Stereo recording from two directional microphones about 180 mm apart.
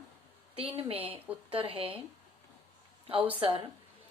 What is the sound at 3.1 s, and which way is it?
Speech, 30° right (ahead or behind).